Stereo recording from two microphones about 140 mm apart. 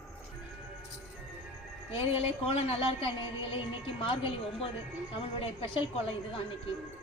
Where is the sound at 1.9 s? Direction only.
45° left (ahead or behind).